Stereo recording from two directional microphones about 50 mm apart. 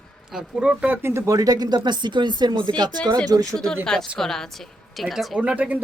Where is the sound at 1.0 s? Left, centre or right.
Right.